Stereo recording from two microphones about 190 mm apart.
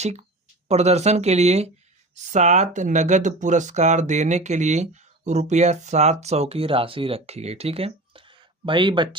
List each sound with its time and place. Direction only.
0.0 s speech: 35° right (ahead or behind)